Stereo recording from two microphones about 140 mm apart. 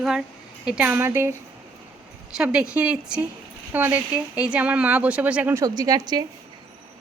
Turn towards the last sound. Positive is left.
turn(degrees=-30)  # may be behind; listen again after turning